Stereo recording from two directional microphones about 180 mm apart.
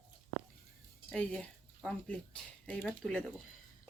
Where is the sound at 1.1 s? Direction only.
5° left (ahead or behind).